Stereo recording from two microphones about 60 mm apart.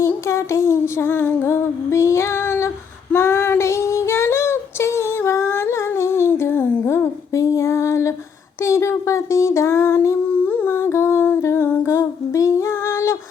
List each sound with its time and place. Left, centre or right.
0.0 s a sound: left
1.5 s female singing: left
3.2 s child singing: left
6.8 s a sound: left
8.6 s child singing: left
10.3 s humming: left
10.7 s humming: left
11.6 s humming: left
11.9 s a sound: left